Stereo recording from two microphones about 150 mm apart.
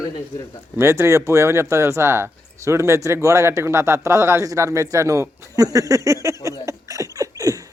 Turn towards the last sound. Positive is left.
turn(degrees=-25)  # may be behind; listen again after turning